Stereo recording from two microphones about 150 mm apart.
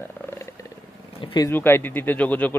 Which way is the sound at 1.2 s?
30° left (ahead or behind).